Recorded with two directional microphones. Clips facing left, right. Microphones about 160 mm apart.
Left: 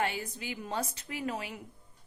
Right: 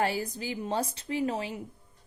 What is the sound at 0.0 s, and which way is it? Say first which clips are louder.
A woman's voice: right 4 dB; 35° right (ahead or behind).